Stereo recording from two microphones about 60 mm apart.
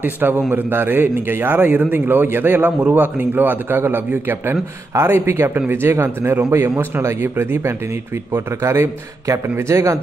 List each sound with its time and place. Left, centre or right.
0.0 s a man's voice: right